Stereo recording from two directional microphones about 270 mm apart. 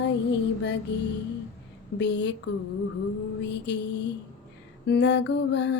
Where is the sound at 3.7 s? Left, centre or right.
Left.